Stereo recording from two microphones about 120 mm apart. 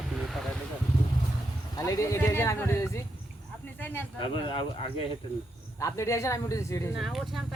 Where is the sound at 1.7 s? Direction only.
30° left (ahead or behind).